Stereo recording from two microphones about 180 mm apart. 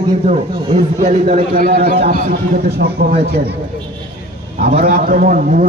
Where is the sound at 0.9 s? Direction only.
40° right (ahead or behind).